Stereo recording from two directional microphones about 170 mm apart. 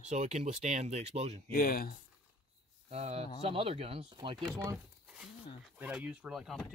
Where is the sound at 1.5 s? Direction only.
60° left (ahead or behind).